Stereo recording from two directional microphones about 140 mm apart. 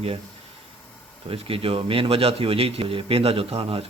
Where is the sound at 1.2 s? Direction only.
45° right (ahead or behind).